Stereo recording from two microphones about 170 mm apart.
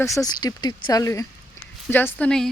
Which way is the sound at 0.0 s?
20° left (ahead or behind).